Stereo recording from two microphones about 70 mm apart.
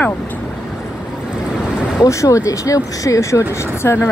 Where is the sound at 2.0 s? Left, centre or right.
Left.